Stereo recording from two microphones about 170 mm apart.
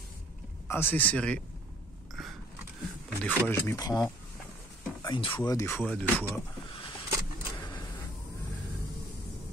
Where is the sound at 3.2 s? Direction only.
15° left (ahead or behind).